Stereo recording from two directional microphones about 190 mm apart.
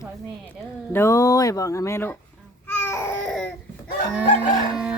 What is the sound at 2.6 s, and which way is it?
Babbling, 15° left (ahead or behind).